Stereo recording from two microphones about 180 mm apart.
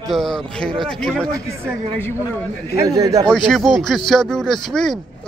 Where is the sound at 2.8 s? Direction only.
20° right (ahead or behind).